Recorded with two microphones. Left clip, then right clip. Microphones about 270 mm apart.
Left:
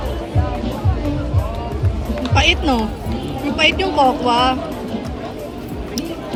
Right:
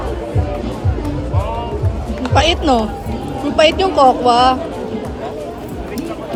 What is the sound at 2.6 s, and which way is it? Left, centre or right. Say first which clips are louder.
Speech: right 4 dB; centre.